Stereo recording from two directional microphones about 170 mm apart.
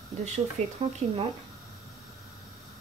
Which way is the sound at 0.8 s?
40° right (ahead or behind).